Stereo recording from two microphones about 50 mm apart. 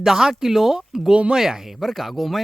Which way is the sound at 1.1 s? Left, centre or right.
Right.